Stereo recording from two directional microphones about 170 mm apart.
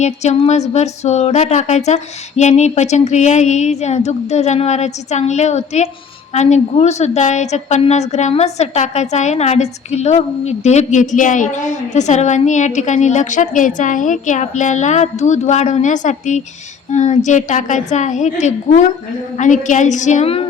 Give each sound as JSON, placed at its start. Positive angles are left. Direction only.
{"t": 0.0, "sound": "a woman's voice", "side_deg": 40}